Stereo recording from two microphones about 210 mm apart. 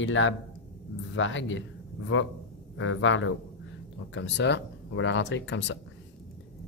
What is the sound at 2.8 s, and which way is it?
Speech, 65° left (ahead or behind).